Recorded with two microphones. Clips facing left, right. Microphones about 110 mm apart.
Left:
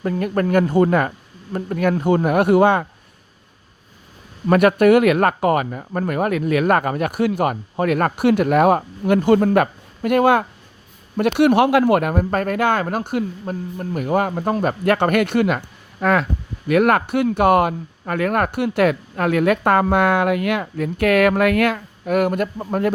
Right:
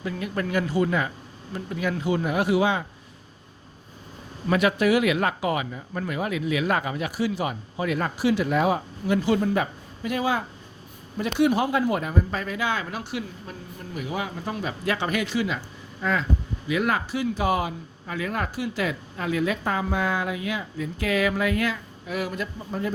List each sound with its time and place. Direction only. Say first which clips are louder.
0.0 s speech: left 8 dB; 50° left (ahead or behind)
4.4 s speech: left 8 dB; 55° left (ahead or behind)